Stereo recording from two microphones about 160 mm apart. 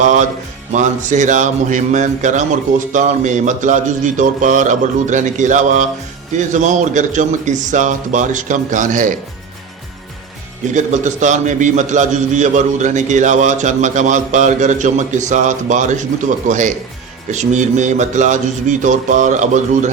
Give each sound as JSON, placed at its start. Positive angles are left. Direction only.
{"t": 0.0, "sound": "a man's voice", "side_deg": -50}
{"t": 10.8, "sound": "a man's voice", "side_deg": -50}